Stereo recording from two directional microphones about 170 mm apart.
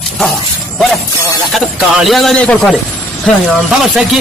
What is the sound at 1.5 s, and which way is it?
Speech, centre (ahead or behind).